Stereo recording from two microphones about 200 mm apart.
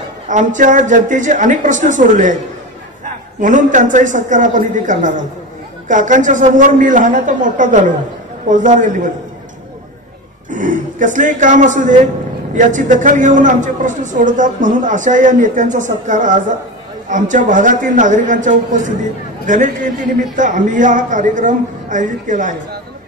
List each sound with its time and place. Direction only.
0.3 s a man's voice: 40° right (ahead or behind)
3.3 s a man's voice: 40° right (ahead or behind)
10.5 s a man's voice: 40° right (ahead or behind)